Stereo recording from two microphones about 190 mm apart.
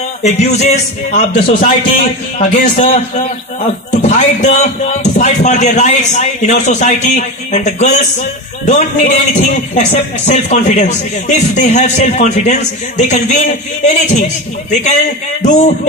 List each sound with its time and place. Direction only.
0.2 s speech: 35° left (ahead or behind)
15.4 s speech: 40° left (ahead or behind)